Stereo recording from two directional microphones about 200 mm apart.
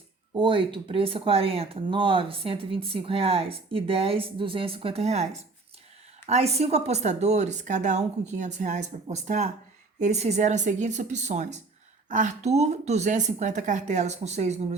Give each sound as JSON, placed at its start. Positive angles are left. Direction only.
{"t": 0.3, "sound": "speech", "side_deg": -25}